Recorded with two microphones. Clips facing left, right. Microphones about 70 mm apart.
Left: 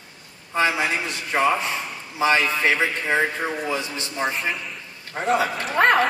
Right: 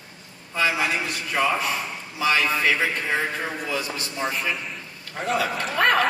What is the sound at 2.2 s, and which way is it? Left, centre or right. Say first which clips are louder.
A man's voice: left 2 dB; left.